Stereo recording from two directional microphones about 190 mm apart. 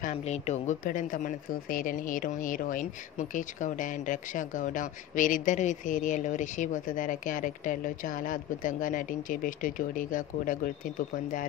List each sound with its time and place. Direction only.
0.0 s speech: 35° left (ahead or behind)